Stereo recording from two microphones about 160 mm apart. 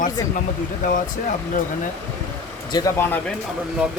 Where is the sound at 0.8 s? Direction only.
60° left (ahead or behind).